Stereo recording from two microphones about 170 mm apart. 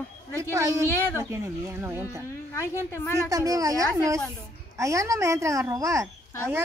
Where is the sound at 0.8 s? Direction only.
15° left (ahead or behind).